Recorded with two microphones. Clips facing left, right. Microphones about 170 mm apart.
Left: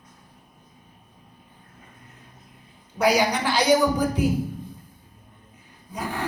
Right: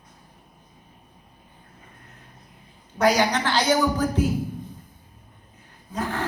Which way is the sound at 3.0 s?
10° left (ahead or behind).